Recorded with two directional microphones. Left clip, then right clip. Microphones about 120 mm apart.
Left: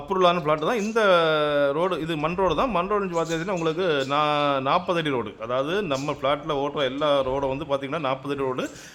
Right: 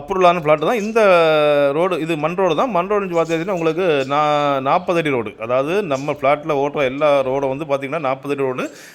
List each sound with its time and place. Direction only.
0.1 s a man's voice: 35° right (ahead or behind)